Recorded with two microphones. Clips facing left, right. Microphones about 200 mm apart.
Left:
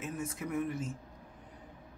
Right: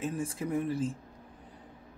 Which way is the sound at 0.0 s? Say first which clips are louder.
Right 5 dB; 30° right (ahead or behind).